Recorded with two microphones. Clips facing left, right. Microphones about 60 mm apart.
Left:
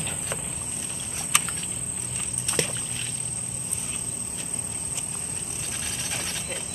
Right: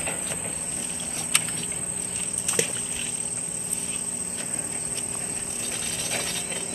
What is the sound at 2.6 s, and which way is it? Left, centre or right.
Boat, centre.